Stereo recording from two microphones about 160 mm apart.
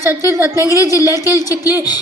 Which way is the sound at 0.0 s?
20° right (ahead or behind).